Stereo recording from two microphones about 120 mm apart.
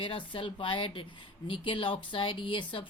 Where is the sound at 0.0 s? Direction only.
45° left (ahead or behind).